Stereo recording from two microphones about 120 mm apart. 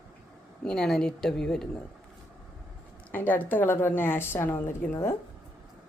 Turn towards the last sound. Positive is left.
turn(degrees=20)  # may be behind; listen again after turning